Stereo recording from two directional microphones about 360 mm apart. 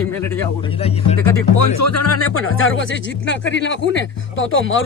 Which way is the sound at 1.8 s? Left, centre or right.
Left.